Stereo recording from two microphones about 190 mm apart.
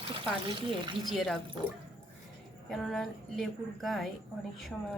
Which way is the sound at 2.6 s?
Centre (ahead or behind).